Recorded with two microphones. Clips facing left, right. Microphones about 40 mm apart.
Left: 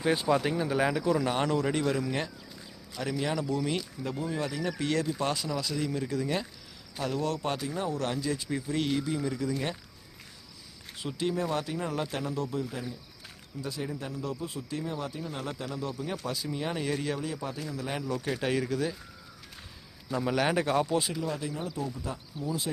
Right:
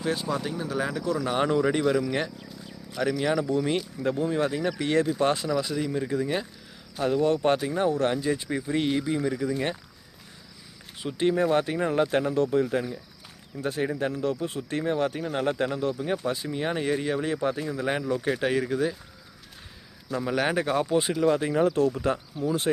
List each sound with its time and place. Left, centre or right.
0.0 s speech: centre
1.3 s speech: centre
2.0 s speech: right
3.2 s speech: centre
3.4 s speech: right; by 6.5 s centre
7.0 s speech: right
8.0 s speech: right
11.2 s speech: right
17.2 s speech: right
18.3 s speech: centre
20.1 s speech: centre
21.2 s speech: right
21.5 s speech: right
22.4 s speech: right